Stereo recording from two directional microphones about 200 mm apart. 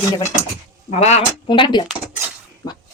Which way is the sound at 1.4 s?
25° left (ahead or behind).